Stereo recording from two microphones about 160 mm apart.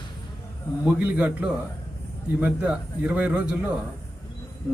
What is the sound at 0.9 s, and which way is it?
A man's voice, 10° right (ahead or behind).